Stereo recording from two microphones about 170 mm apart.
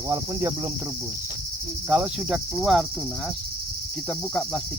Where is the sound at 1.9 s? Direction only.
5° right (ahead or behind).